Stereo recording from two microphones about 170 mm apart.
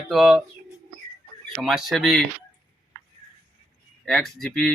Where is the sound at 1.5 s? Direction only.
Centre (ahead or behind).